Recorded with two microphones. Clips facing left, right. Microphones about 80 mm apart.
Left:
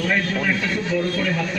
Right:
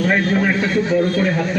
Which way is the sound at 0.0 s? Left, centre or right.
Right.